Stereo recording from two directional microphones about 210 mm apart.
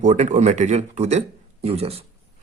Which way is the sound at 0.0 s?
35° right (ahead or behind).